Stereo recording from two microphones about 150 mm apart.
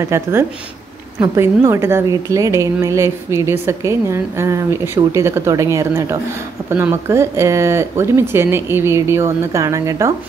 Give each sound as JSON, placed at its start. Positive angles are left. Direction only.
{"t": 0.0, "sound": "a woman's voice", "side_deg": -20}